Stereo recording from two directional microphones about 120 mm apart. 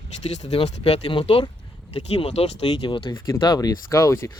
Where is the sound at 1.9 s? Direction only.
60° left (ahead or behind).